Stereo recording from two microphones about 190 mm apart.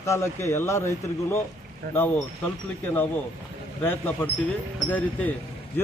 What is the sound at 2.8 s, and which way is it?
Speech, 10° left (ahead or behind).